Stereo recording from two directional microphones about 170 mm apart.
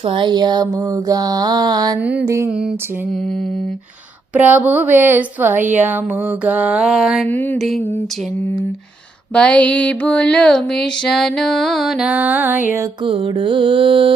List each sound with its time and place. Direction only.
0.0 s mantra: 30° right (ahead or behind)
2.0 s mantra: 10° right (ahead or behind)
2.5 s music: 5° right (ahead or behind)
4.4 s mantra: 10° right (ahead or behind)
7.3 s speech: 10° left (ahead or behind)
9.3 s speech: 5° left (ahead or behind)
10.8 s music: 5° left (ahead or behind); by 12.9 s 10° right (ahead or behind)
13.1 s mantra: 30° right (ahead or behind)